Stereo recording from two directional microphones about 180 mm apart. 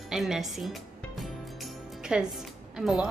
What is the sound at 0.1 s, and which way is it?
Music, centre (ahead or behind).